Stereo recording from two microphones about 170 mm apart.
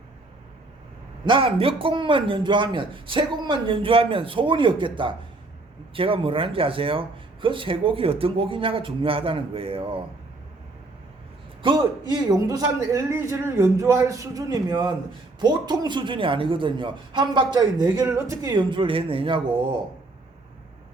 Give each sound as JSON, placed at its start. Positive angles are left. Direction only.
{"t": 1.2, "sound": "a man's voice", "side_deg": -30}
{"t": 11.6, "sound": "a man's voice", "side_deg": -25}